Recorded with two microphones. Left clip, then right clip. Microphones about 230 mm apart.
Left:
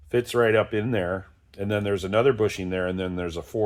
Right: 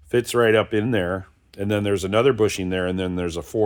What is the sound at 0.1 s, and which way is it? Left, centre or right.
Speech, right.